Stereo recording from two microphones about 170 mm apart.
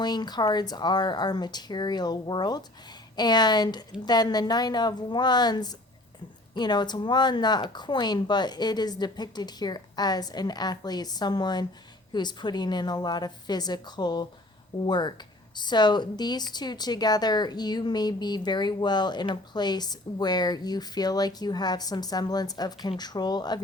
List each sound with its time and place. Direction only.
0.0 s speech: 25° left (ahead or behind)